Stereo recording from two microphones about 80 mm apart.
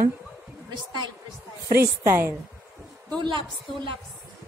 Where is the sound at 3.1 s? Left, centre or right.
Right.